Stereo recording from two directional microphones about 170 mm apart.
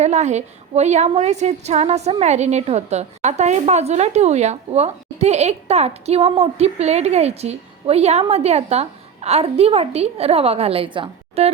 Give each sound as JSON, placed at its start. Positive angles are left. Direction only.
{"t": 0.0, "sound": "a woman's voice", "side_deg": -40}